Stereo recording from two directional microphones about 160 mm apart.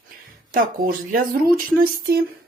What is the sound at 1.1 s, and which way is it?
Speech, 65° right (ahead or behind).